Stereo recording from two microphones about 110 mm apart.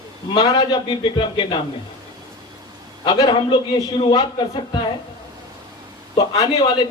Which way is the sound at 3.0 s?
45° left (ahead or behind).